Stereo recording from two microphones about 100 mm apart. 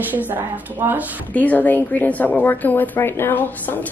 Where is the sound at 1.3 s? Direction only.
15° left (ahead or behind).